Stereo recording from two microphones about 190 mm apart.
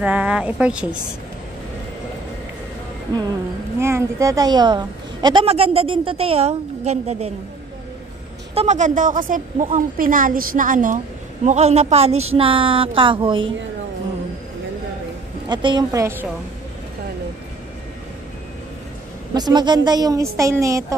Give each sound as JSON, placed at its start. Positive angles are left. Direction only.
{"t": 0.0, "sound": "a woman's voice", "side_deg": -5}
{"t": 3.8, "sound": "a woman's voice", "side_deg": -15}
{"t": 8.5, "sound": "a woman's voice", "side_deg": -40}
{"t": 15.4, "sound": "a woman's voice", "side_deg": -25}
{"t": 19.3, "sound": "a woman's voice", "side_deg": -20}